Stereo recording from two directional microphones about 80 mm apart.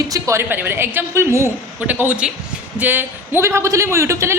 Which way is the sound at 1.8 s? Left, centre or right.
Right.